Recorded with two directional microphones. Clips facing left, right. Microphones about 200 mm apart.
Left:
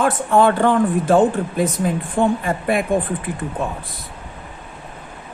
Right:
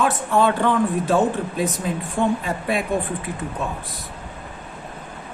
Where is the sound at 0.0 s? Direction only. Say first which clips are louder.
Left 3 dB; 50° left (ahead or behind).